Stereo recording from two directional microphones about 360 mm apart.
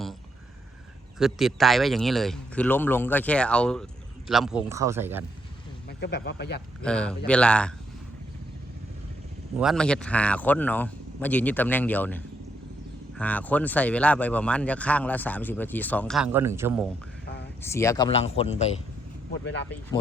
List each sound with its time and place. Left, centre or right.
1.2 s speech: centre
6.0 s speech: left
6.8 s speech: centre
9.6 s speech: centre
17.6 s speech: centre